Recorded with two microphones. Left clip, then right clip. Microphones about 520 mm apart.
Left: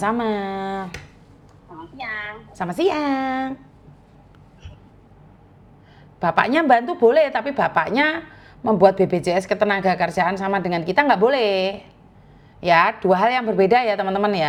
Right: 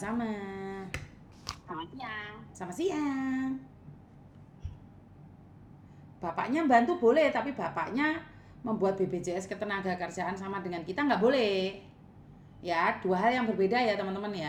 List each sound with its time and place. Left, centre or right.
0.0 s speech: left
2.6 s a woman's voice: left
6.1 s a woman's voice: left